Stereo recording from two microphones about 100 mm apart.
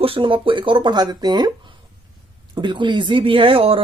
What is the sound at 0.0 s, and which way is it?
Speech, 65° right (ahead or behind).